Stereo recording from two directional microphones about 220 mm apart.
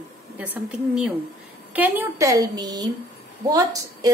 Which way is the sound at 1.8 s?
10° right (ahead or behind).